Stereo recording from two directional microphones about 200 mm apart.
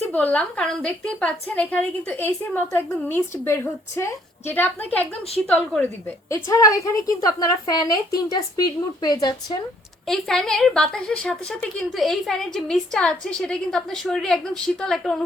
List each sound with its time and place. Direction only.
0.1 s a woman's voice: 10° left (ahead or behind)
10.1 s a woman's voice: centre (ahead or behind)